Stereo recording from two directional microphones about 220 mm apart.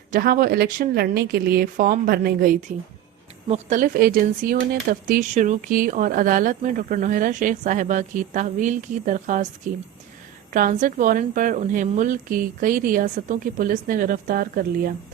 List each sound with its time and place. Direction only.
0.1 s speech: 40° right (ahead or behind)
10.5 s speech: 35° right (ahead or behind)